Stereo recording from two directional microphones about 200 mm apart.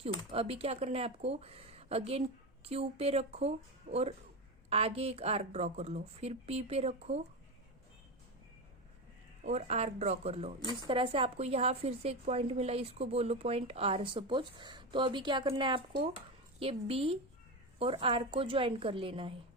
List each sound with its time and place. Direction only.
0.3 s a woman's voice: 30° right (ahead or behind)
9.4 s a woman's voice: 35° right (ahead or behind)